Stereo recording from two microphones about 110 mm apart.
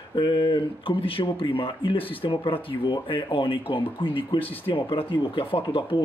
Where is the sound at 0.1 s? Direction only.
45° left (ahead or behind).